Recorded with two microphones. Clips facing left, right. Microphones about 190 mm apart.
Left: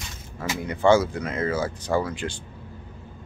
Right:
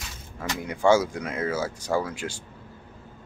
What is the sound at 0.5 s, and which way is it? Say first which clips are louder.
Speech: left 2 dB; 10° right (ahead or behind).